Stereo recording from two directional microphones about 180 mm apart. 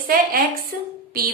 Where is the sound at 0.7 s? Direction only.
55° right (ahead or behind).